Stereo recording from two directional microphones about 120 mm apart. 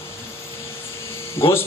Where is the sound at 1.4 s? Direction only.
20° left (ahead or behind).